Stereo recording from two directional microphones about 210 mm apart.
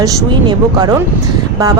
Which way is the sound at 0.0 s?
15° right (ahead or behind).